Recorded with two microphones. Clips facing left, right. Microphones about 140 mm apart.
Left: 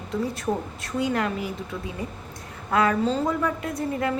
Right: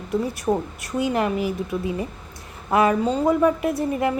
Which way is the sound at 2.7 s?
20° right (ahead or behind).